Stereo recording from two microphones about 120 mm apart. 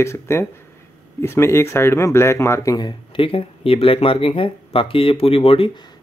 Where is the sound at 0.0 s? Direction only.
20° left (ahead or behind); by 5.7 s 50° left (ahead or behind).